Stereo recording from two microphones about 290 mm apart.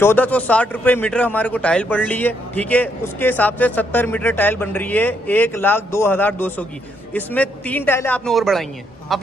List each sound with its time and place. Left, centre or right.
0.0 s a man's voice: centre